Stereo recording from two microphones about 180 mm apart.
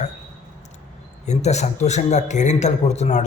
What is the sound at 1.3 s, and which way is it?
Speech, 40° left (ahead or behind).